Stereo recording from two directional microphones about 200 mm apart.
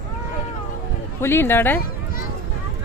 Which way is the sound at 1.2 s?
10° left (ahead or behind).